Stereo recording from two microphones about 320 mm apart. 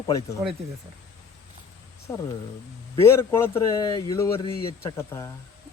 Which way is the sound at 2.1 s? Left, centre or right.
Centre.